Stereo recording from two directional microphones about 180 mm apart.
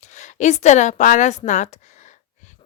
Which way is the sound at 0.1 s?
40° left (ahead or behind).